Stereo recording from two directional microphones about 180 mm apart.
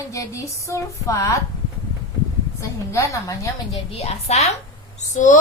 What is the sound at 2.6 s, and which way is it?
Speech, 15° left (ahead or behind).